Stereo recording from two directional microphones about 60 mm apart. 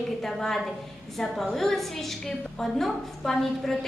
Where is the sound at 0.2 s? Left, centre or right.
Centre.